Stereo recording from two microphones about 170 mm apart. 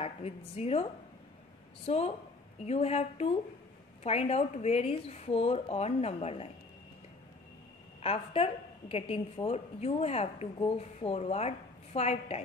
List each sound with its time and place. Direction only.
0.0 s a woman's voice: 35° left (ahead or behind)
1.9 s a woman's voice: 35° left (ahead or behind)
8.0 s a woman's voice: 35° left (ahead or behind)